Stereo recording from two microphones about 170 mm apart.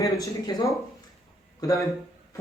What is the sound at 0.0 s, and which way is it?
A man's voice, 20° left (ahead or behind).